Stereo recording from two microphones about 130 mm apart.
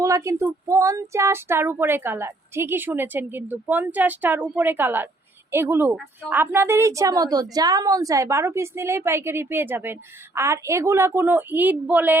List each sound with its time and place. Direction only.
0.0 s child singing: 25° right (ahead or behind)
6.3 s a woman's voice: 15° right (ahead or behind)